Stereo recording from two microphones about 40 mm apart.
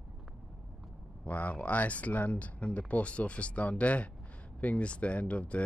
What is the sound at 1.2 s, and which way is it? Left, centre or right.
Speech, left.